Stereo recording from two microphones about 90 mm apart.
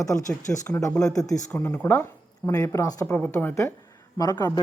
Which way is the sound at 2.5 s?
40° left (ahead or behind).